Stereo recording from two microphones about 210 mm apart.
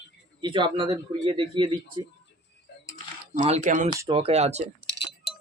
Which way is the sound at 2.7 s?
55° left (ahead or behind).